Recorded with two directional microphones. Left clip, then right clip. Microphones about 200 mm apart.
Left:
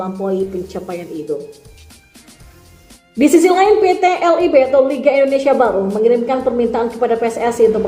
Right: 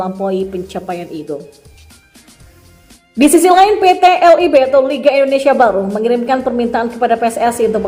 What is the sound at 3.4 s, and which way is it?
A woman's voice, 20° right (ahead or behind).